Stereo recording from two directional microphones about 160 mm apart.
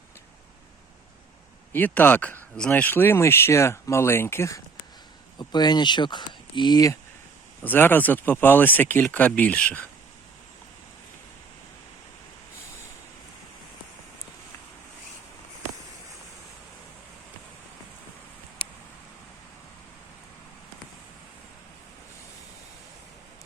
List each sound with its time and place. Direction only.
1.7 s speech: 10° left (ahead or behind)
7.6 s speech: 10° left (ahead or behind)